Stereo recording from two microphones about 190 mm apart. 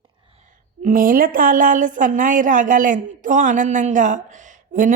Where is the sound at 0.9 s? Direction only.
45° right (ahead or behind).